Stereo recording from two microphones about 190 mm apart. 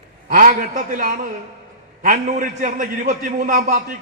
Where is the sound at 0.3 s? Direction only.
45° right (ahead or behind).